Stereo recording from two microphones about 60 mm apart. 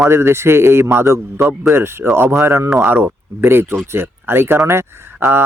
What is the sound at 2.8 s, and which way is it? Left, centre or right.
Speech, right.